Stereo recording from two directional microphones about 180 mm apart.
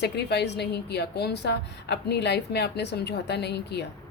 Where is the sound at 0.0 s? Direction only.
70° left (ahead or behind).